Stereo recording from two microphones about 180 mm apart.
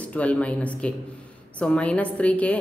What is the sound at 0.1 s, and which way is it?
A woman's voice, 5° left (ahead or behind).